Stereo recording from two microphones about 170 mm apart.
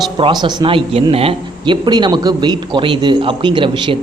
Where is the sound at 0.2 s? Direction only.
30° right (ahead or behind).